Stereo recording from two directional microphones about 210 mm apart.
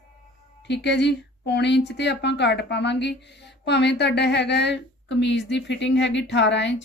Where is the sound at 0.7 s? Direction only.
55° left (ahead or behind).